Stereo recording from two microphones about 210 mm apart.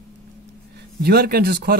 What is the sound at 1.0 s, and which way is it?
Speech, 50° right (ahead or behind).